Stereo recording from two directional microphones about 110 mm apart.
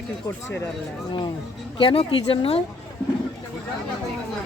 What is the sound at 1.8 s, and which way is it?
Speech, 55° left (ahead or behind).